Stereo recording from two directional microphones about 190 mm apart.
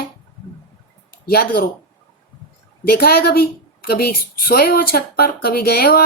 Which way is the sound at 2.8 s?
55° left (ahead or behind).